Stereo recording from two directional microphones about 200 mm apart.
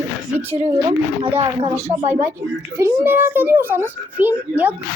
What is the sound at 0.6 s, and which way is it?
A woman's voice, 25° right (ahead or behind).